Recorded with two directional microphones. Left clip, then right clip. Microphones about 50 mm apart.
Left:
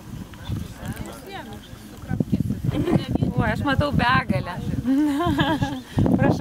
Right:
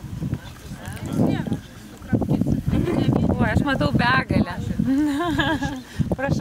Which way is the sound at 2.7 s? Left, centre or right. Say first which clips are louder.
Left 2 dB; left.